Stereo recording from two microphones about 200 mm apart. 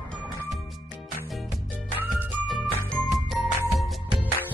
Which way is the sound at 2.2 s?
Centre (ahead or behind).